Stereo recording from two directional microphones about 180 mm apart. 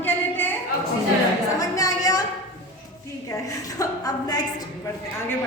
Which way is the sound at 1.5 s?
20° left (ahead or behind).